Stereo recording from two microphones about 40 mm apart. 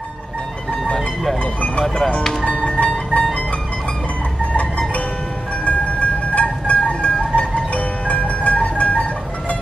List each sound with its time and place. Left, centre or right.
1.4 s speech: left
2.6 s music: centre
5.7 s a sound: left
6.9 s music: left